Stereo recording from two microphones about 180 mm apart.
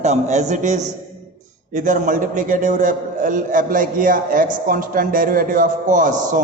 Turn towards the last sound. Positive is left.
turn(degrees=-45)  # may be behind; listen again after turning